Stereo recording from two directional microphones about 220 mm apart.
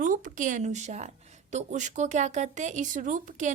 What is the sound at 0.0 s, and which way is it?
Speech, 35° right (ahead or behind).